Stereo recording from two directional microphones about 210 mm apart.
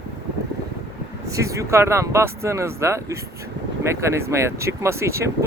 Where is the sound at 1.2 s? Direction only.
15° right (ahead or behind).